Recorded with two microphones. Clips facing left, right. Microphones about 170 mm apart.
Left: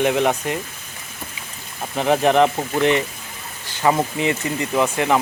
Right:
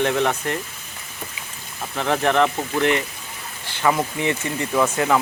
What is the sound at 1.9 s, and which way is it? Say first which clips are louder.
Speech: left 3 dB; 15° left (ahead or behind).